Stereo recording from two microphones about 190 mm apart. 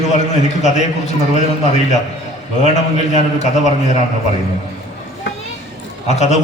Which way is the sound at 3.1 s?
40° left (ahead or behind).